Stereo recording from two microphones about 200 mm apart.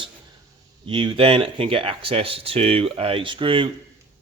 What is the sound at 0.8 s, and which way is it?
A man's voice, 25° right (ahead or behind).